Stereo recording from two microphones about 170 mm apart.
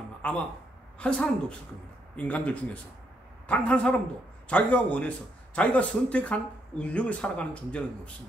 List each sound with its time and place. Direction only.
0.2 s a woman's voice: 10° left (ahead or behind)